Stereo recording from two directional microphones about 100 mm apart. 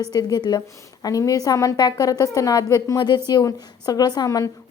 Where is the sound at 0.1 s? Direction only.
40° left (ahead or behind).